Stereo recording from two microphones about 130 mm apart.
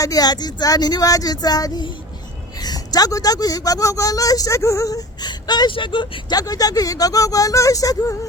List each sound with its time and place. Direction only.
0.0 s a woman's voice: 30° left (ahead or behind)